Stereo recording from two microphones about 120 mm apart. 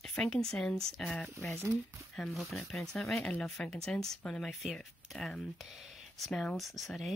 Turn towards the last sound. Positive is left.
turn(degrees=0)  # may be behind; listen again after turning